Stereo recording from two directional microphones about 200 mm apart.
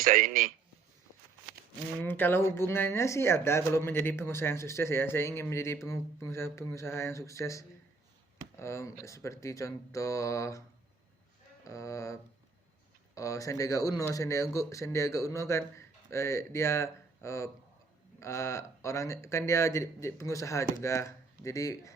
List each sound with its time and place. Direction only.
0.0 s a man's voice: 40° right (ahead or behind)
2.0 s speech: 10° left (ahead or behind)
11.6 s speech: 15° left (ahead or behind)